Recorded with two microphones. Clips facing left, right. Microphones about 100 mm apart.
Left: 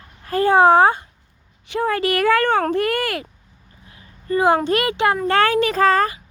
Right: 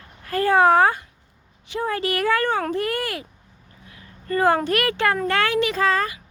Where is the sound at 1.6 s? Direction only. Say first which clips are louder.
Left 4 dB; 70° left (ahead or behind).